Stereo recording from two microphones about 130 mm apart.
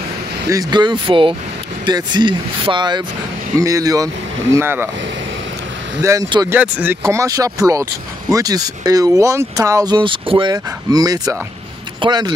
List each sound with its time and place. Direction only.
0.5 s speech: 30° right (ahead or behind)
3.5 s speech: 25° right (ahead or behind)
6.5 s speech: 15° right (ahead or behind); by 10.5 s 40° right (ahead or behind)
10.5 s speech: 30° right (ahead or behind)